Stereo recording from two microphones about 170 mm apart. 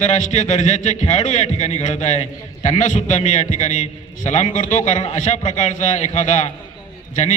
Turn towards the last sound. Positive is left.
turn(degrees=45)  # may be behind; listen again after turning